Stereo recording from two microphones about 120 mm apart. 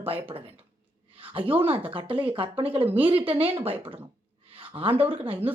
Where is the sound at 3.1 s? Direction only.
50° right (ahead or behind).